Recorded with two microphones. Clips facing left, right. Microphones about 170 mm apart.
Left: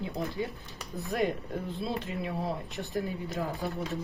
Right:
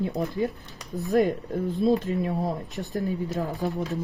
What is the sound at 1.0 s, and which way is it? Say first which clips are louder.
Speech: right 8 dB; 40° right (ahead or behind).